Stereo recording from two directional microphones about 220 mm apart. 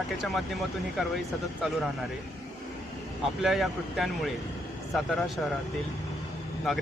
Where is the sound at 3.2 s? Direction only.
Centre (ahead or behind).